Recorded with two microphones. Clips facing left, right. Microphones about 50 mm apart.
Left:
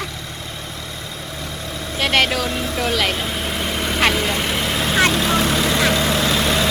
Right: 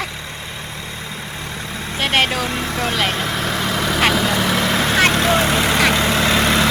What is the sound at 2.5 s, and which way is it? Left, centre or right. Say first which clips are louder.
Speech: even; right.